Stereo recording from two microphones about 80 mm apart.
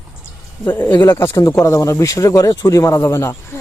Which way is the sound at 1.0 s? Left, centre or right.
Left.